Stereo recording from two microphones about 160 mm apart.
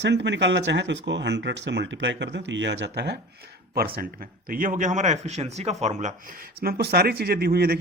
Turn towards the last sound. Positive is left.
turn(degrees=-75)  # may be behind; listen again after turning